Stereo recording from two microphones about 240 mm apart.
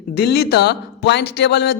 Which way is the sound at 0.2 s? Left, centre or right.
Left.